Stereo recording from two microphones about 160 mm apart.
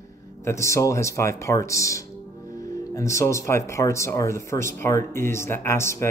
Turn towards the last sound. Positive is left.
turn(degrees=15)  # may be behind; listen again after turning